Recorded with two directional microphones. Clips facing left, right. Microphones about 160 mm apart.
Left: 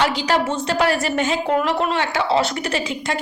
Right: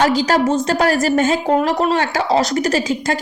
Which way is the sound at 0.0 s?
45° right (ahead or behind).